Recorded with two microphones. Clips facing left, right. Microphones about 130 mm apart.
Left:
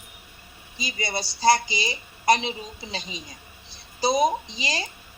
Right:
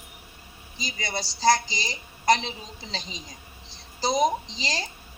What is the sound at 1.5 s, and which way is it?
Speech, 60° left (ahead or behind).